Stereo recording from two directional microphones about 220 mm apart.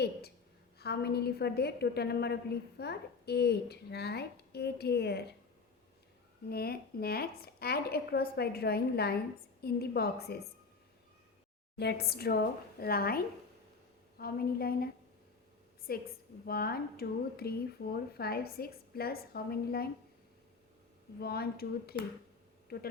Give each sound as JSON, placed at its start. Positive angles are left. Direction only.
{"t": 0.0, "sound": "a woman's voice", "side_deg": 45}
{"t": 6.5, "sound": "a woman's voice", "side_deg": 45}
{"t": 11.8, "sound": "a woman's voice", "side_deg": 45}
{"t": 15.9, "sound": "a woman's voice", "side_deg": 45}
{"t": 21.2, "sound": "a woman's voice", "side_deg": 45}